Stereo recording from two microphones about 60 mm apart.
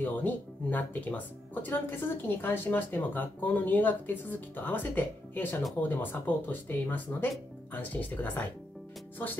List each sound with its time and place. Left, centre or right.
0.0 s speech: left